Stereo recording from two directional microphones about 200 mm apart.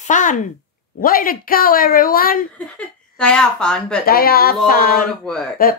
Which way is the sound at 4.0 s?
50° left (ahead or behind).